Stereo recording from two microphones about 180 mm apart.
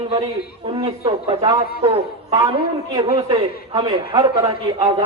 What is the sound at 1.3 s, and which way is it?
A man's voice, 20° right (ahead or behind).